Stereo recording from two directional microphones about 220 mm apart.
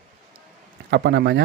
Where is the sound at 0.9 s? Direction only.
50° right (ahead or behind).